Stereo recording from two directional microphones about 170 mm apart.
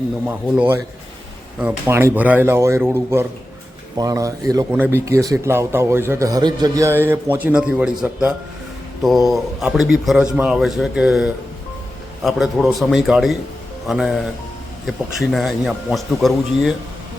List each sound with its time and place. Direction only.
0.3 s speech: 10° right (ahead or behind)
9.0 s speech: centre (ahead or behind)